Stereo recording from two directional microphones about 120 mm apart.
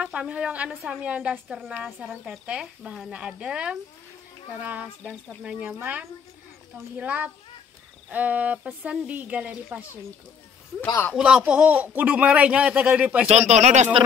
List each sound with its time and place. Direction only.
0.0 s a man's voice: 10° right (ahead or behind)
11.1 s a man's voice: 5° right (ahead or behind)
13.3 s speech: 65° right (ahead or behind)